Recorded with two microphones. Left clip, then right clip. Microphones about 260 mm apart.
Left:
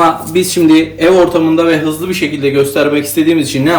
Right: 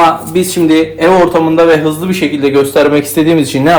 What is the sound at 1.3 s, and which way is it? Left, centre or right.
A man's voice, right.